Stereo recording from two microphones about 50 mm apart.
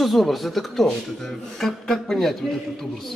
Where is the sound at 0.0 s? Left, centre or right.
Centre.